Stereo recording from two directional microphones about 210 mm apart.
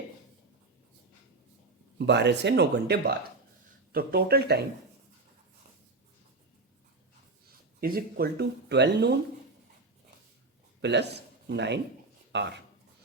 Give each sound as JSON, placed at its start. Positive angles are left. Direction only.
{"t": 2.0, "sound": "speech", "side_deg": -55}
{"t": 7.8, "sound": "speech", "side_deg": -45}
{"t": 10.8, "sound": "speech", "side_deg": -55}